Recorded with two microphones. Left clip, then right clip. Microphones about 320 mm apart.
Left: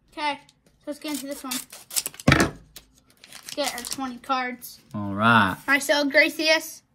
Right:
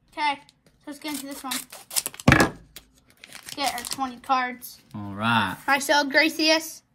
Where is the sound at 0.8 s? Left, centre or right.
Centre.